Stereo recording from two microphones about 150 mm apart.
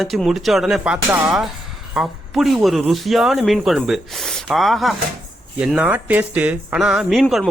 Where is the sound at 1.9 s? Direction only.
Centre (ahead or behind).